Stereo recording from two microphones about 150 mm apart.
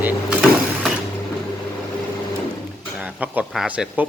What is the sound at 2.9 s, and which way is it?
Speech, 10° right (ahead or behind).